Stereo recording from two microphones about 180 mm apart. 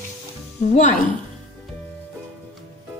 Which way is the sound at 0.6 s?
40° left (ahead or behind).